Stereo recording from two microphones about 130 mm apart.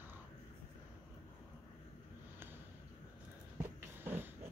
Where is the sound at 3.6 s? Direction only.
15° right (ahead or behind).